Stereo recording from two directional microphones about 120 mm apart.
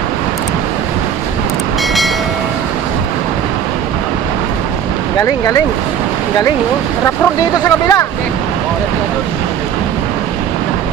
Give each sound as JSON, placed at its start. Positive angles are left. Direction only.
{"t": 7.6, "sound": "speech", "side_deg": 30}